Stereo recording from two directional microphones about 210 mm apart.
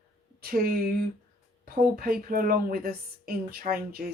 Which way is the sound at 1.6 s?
45° right (ahead or behind).